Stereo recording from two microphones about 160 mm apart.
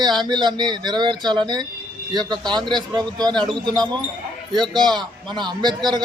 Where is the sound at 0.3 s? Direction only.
25° right (ahead or behind).